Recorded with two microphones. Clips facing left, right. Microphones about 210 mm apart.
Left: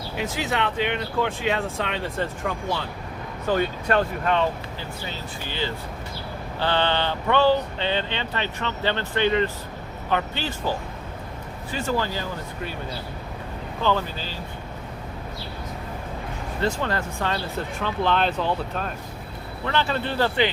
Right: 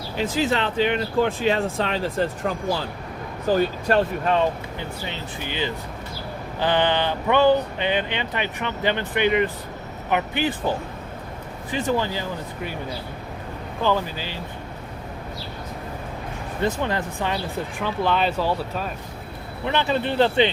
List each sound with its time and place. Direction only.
0.2 s speech: 30° right (ahead or behind)
5.5 s speech: 15° right (ahead or behind)
13.8 s speech: 10° right (ahead or behind)
16.6 s speech: 20° right (ahead or behind)
19.6 s speech: 15° right (ahead or behind)